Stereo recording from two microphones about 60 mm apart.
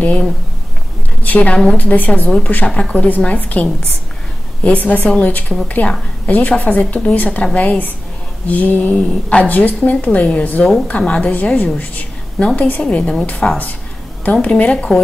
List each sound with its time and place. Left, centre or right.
1.2 s a woman's voice: left
4.7 s a woman's voice: left
8.9 s a woman's voice: centre
11.8 s a sound: left
12.5 s a woman's voice: left